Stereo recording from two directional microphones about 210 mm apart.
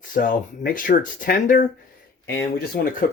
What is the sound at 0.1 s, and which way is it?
Speech, 40° left (ahead or behind).